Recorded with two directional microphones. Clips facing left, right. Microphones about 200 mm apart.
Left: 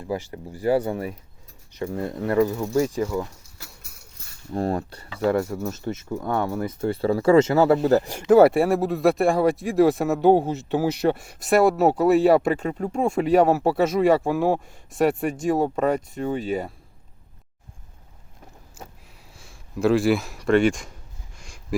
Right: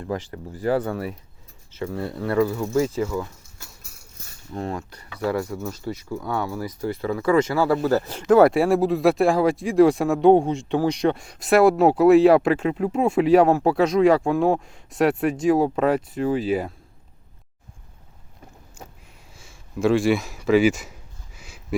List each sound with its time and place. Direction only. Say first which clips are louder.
0.0 s speech: even; 10° left (ahead or behind)
4.5 s speech: left 5 dB; 35° left (ahead or behind); by 8.2 s 15° left (ahead or behind)
8.3 s speech: even; 5° left (ahead or behind)
19.3 s a sound: even; centre (ahead or behind)